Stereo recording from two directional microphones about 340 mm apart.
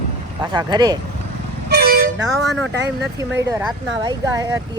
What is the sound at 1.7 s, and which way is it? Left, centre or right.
Vehicle, right.